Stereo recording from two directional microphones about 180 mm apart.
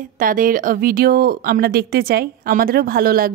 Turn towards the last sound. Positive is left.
turn(degrees=-55)  # may be behind; listen again after turning